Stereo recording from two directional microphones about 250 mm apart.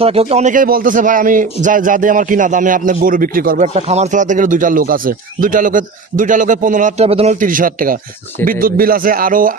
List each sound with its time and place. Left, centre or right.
0.0 s a man's voice: right